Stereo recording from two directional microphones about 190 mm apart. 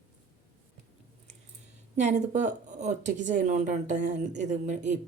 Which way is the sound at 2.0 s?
40° right (ahead or behind).